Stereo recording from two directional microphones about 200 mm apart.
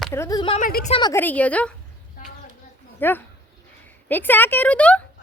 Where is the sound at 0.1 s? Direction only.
15° left (ahead or behind).